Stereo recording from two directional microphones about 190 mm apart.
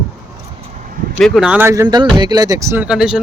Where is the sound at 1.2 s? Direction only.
5° right (ahead or behind).